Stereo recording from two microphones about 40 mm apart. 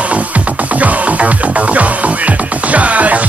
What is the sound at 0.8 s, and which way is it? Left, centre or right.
Music, right.